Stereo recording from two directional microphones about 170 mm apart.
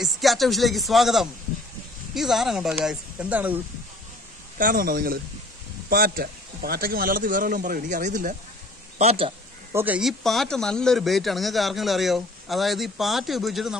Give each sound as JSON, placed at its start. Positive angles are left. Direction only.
{"t": 0.0, "sound": "speech", "side_deg": 0}
{"t": 4.6, "sound": "speech", "side_deg": -55}
{"t": 8.9, "sound": "a man's voice", "side_deg": -35}
{"t": 9.7, "sound": "speech", "side_deg": -10}